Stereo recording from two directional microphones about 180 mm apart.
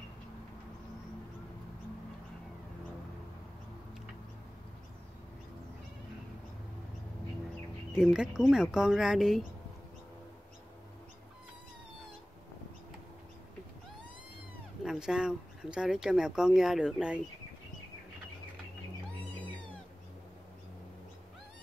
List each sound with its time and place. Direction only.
7.9 s speech: 5° right (ahead or behind)
14.9 s speech: 5° right (ahead or behind)